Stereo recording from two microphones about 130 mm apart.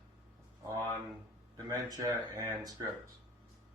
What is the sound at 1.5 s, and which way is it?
Speech, 30° right (ahead or behind).